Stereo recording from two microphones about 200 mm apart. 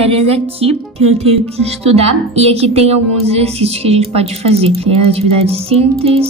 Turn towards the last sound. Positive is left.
turn(degrees=-30)  # may be behind; listen again after turning